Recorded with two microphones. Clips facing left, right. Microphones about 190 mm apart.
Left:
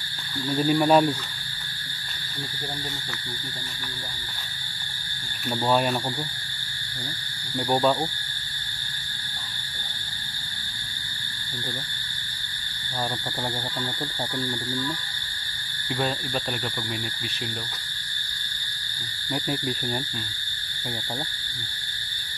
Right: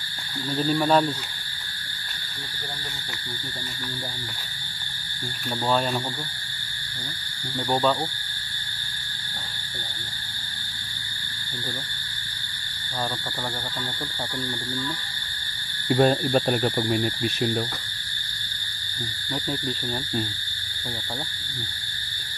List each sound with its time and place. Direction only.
0.7 s speech: 10° left (ahead or behind)
5.7 s speech: 15° left (ahead or behind)
7.5 s speech: 10° left (ahead or behind)
15.9 s speech: 45° right (ahead or behind)
19.3 s speech: 10° left (ahead or behind)